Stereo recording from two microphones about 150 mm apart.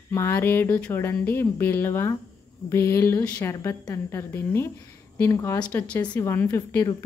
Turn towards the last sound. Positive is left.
turn(degrees=20)  # may be behind; listen again after turning